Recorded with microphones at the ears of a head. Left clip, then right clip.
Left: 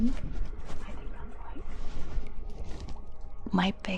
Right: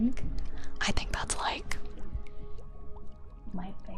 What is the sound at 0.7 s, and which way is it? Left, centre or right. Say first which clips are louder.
Speech: right 15 dB; right.